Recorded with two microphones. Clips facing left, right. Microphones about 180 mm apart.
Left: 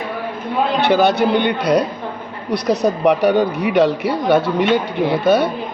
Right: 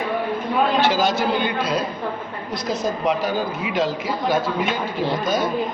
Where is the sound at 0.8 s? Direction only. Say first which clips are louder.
Left 5 dB; 60° left (ahead or behind).